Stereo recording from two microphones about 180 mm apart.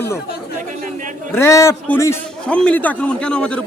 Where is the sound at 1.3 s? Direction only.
15° left (ahead or behind).